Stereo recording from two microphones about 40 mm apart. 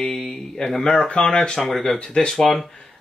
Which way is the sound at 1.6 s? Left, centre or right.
Centre.